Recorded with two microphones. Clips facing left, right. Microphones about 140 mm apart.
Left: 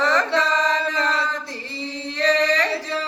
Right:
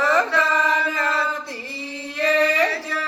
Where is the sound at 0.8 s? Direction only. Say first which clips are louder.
Even; 20° left (ahead or behind).